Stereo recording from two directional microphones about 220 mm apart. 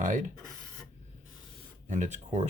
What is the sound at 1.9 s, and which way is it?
Speech, 35° right (ahead or behind).